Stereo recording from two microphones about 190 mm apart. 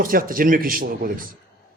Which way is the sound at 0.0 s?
50° right (ahead or behind).